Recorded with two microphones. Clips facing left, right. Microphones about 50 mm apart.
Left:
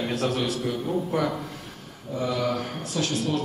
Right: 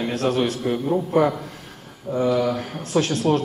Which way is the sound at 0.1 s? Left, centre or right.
Right.